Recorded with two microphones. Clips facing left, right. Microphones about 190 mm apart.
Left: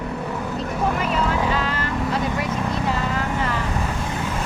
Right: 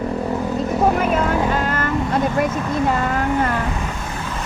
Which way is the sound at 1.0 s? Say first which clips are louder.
Right 4 dB; 50° right (ahead or behind).